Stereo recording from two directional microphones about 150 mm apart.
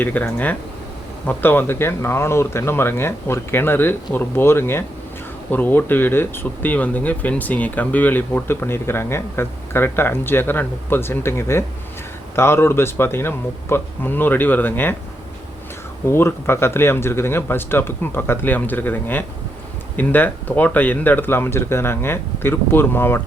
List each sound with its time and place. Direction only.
0.0 s speech: 10° left (ahead or behind)
16.0 s speech: 15° left (ahead or behind)